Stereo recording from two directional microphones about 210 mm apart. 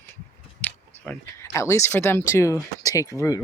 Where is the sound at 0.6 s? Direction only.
10° left (ahead or behind).